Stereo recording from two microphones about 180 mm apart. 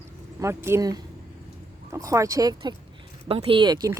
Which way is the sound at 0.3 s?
15° right (ahead or behind).